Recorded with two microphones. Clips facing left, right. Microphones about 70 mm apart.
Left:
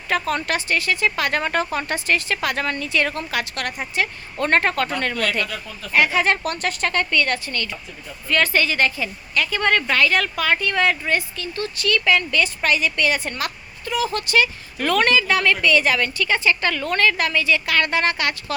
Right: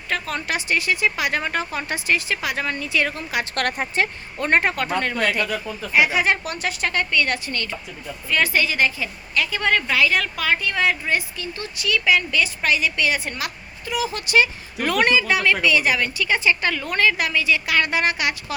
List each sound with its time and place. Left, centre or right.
0.1 s a woman's voice: centre
0.5 s speech: centre
3.5 s speech: right
4.4 s speech: centre; by 7.8 s right
8.3 s a woman's voice: centre
11.3 s speech: centre